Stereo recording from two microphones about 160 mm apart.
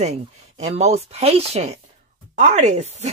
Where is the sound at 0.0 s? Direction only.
45° right (ahead or behind).